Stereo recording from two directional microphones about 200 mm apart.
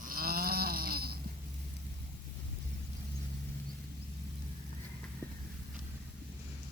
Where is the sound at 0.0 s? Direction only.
45° right (ahead or behind).